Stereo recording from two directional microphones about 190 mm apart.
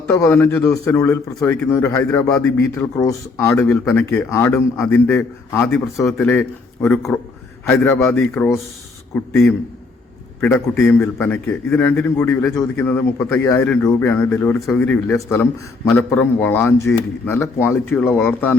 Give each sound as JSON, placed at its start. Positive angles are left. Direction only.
{"t": 0.1, "sound": "a man's voice", "side_deg": 10}
{"t": 10.4, "sound": "a man's voice", "side_deg": 10}